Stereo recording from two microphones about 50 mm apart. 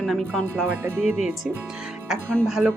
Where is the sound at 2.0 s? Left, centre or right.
Centre.